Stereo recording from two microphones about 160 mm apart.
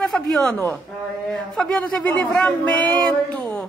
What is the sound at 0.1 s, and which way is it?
A man's voice, 5° left (ahead or behind).